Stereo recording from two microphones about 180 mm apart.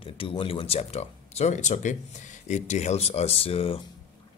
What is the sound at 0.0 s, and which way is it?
Speech, 30° left (ahead or behind).